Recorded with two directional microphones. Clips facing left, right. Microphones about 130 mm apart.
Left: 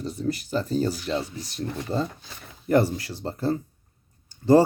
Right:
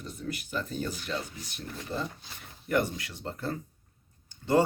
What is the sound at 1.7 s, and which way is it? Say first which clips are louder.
Speech: left 6 dB; 75° left (ahead or behind).